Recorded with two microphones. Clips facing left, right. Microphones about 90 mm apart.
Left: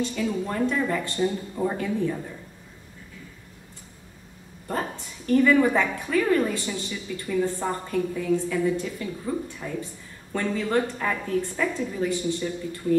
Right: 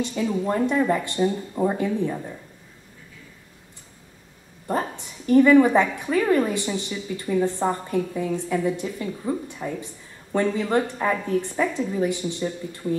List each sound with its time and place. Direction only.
0.0 s a woman's voice: 20° right (ahead or behind)
5.2 s a woman's voice: 20° right (ahead or behind)